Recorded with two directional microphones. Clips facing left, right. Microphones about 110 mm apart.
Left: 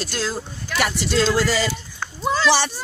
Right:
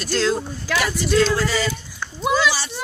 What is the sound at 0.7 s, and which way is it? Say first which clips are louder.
Speech: right 1 dB; 90° right.